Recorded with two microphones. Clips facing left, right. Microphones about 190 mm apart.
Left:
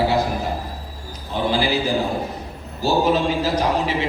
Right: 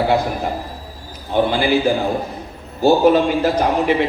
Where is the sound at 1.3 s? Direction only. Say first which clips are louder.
Right 7 dB; 60° right (ahead or behind).